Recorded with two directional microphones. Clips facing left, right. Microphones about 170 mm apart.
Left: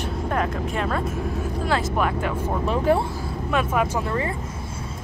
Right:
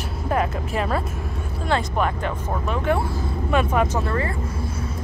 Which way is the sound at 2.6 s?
30° left (ahead or behind).